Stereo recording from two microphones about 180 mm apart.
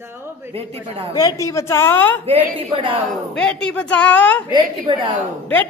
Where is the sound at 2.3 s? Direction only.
30° right (ahead or behind).